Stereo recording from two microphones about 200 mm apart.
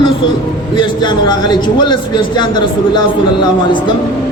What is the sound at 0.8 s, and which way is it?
A man's voice, 20° left (ahead or behind).